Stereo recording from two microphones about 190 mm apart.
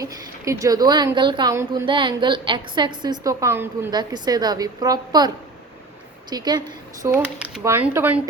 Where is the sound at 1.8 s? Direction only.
25° right (ahead or behind).